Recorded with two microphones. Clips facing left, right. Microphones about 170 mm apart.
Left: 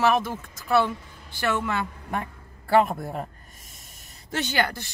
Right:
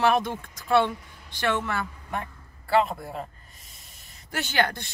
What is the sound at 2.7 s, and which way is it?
Speech, 45° left (ahead or behind).